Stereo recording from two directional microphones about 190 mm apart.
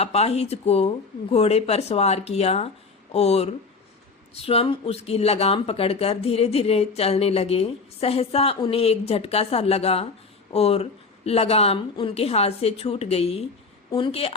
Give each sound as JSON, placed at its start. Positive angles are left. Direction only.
{"t": 0.0, "sound": "speech", "side_deg": 35}